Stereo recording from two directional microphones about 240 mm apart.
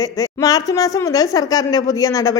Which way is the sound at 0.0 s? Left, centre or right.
Centre.